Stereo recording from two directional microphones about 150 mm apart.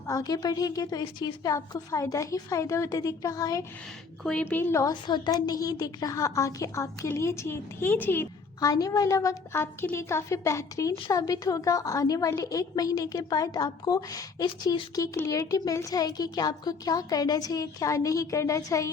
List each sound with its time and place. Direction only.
0.1 s a woman's voice: 25° left (ahead or behind)
4.2 s a woman's voice: 5° left (ahead or behind)
8.6 s a woman's voice: 25° left (ahead or behind)